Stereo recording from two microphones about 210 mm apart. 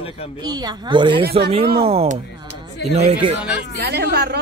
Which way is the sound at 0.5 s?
20° right (ahead or behind).